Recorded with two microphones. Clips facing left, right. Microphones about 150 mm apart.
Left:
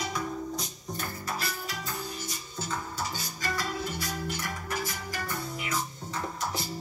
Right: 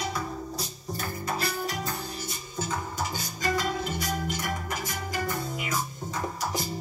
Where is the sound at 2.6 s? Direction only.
20° right (ahead or behind).